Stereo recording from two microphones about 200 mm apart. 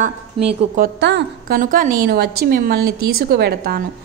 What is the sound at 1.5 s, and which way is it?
A woman's voice, 40° right (ahead or behind).